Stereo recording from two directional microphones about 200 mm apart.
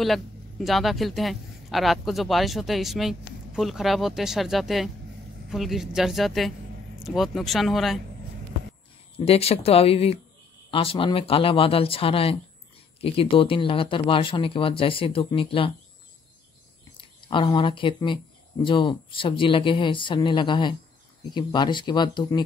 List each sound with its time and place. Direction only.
0.0 s speech: centre (ahead or behind)
9.1 s speech: 30° left (ahead or behind)
17.3 s speech: 25° left (ahead or behind)